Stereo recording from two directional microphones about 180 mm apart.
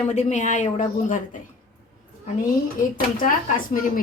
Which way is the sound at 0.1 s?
40° left (ahead or behind).